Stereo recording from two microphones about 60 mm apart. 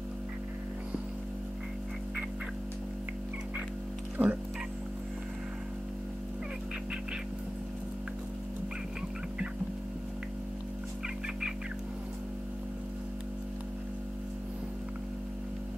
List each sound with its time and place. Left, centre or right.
4.2 s music: right